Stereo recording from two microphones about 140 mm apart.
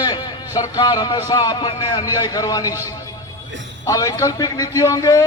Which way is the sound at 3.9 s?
25° left (ahead or behind).